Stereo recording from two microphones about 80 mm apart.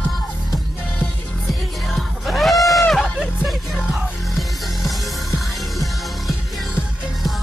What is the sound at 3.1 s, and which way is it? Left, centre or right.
Music, centre.